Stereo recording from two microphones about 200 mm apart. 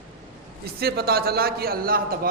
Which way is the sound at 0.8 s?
50° right (ahead or behind).